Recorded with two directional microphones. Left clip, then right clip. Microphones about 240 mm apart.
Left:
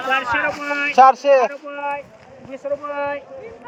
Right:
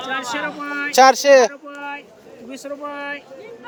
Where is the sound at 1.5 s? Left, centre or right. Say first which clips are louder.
Left 4 dB; right.